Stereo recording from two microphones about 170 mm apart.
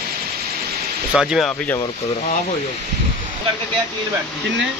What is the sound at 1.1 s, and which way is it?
Speech, 5° right (ahead or behind).